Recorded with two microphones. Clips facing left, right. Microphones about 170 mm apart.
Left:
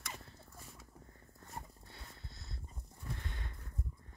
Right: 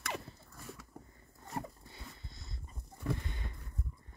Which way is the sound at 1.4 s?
90° right.